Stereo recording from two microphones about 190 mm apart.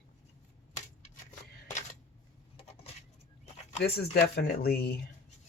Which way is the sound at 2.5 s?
35° left (ahead or behind).